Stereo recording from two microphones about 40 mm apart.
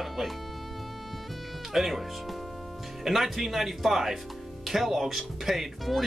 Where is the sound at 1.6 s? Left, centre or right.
Centre.